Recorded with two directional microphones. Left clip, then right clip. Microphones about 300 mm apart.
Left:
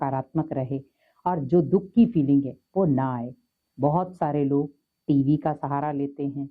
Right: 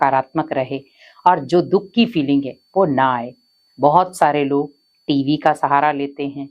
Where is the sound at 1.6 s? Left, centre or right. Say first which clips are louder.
Right 6 dB; centre.